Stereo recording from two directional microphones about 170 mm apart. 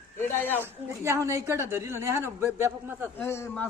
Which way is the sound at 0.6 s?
15° right (ahead or behind).